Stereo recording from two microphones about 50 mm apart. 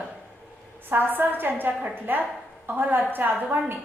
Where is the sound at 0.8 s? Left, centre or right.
Right.